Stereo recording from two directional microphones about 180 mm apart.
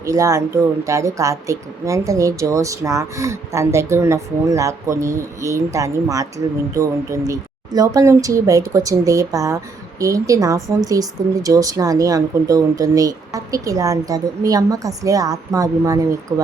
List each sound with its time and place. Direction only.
0.0 s speech: 15° right (ahead or behind)